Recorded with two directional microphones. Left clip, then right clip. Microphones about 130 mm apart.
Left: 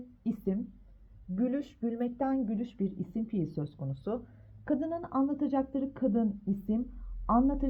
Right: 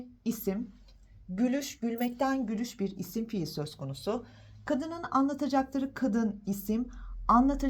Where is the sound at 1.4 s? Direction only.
45° left (ahead or behind).